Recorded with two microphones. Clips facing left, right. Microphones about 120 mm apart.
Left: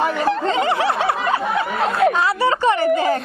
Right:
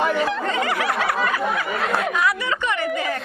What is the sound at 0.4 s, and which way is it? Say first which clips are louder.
Snicker: left 4 dB; 25° left (ahead or behind).